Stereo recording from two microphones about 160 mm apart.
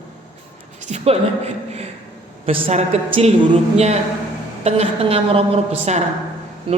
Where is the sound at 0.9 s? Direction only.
40° right (ahead or behind).